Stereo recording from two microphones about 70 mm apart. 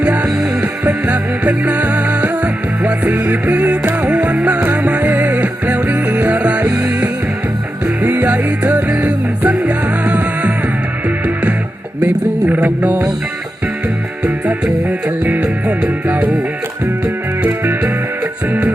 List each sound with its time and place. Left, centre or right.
0.0 s music: centre
0.3 s music: centre
12.6 s music: right
14.3 s music: centre
17.4 s music: right